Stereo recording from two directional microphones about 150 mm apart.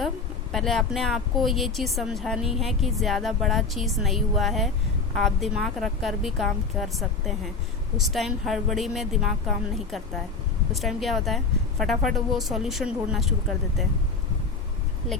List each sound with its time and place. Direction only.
0.5 s speech: centre (ahead or behind)